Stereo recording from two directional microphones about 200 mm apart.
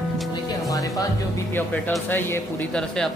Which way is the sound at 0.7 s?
15° left (ahead or behind).